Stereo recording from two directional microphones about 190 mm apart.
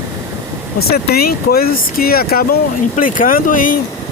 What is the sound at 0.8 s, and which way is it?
Speech, 55° left (ahead or behind).